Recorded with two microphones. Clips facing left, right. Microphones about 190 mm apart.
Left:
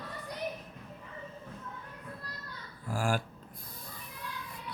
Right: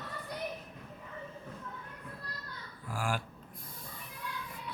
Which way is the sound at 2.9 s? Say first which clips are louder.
Left 4 dB; 45° left (ahead or behind).